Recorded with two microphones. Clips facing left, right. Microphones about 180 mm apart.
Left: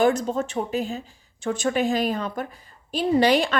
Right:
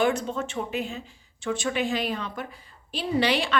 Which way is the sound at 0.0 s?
40° left (ahead or behind).